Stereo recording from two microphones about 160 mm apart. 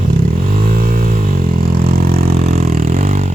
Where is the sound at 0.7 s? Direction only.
65° right (ahead or behind).